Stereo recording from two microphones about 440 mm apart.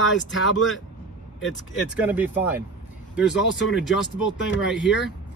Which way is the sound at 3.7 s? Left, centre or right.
Centre.